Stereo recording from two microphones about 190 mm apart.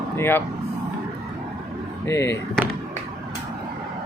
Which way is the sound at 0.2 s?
10° left (ahead or behind).